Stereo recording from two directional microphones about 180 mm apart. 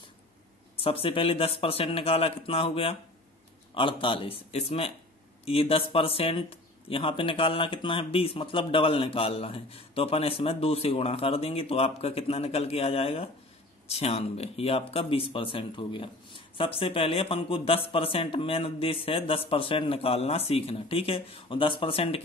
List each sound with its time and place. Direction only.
0.7 s speech: 30° left (ahead or behind)